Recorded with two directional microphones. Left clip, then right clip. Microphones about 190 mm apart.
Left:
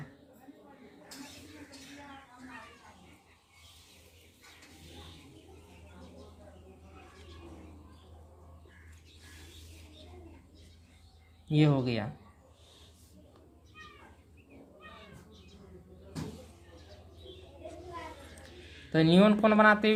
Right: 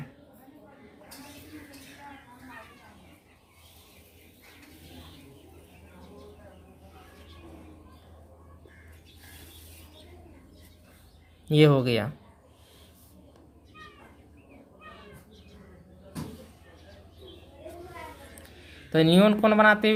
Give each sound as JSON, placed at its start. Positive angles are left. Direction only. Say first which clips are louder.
{"t": 11.4, "sound": "speech", "louder": "right 8 dB", "side_deg": -35}
{"t": 18.9, "sound": "speech", "louder": "right 4 dB", "side_deg": -20}